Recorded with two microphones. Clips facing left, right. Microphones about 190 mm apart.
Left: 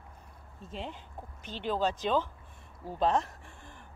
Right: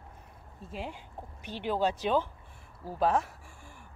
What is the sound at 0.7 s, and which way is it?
Speech, 10° right (ahead or behind).